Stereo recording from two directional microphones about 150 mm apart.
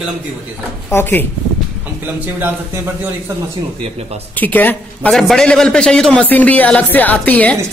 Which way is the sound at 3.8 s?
45° right (ahead or behind).